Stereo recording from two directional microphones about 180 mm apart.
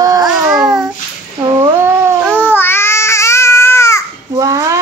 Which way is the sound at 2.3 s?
10° left (ahead or behind).